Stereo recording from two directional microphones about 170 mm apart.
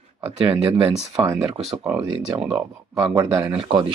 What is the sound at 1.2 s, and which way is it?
Speech, 15° right (ahead or behind).